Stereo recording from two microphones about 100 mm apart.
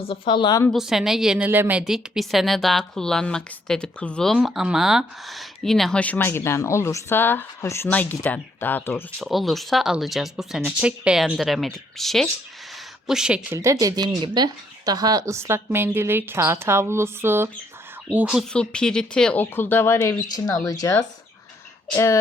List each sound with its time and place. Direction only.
0.0 s speech: 60° left (ahead or behind)
0.7 s speech: 5° right (ahead or behind)
1.4 s speech: 20° right (ahead or behind)
1.8 s speech: centre (ahead or behind); by 9.0 s 20° left (ahead or behind)
9.2 s speech: centre (ahead or behind)
13.5 s speech: 30° right (ahead or behind)
18.1 s speech: 10° right (ahead or behind)
18.5 s speech: 10° left (ahead or behind); by 20.1 s 25° left (ahead or behind)
20.2 s speech: 40° left (ahead or behind)
21.9 s speech: 30° left (ahead or behind)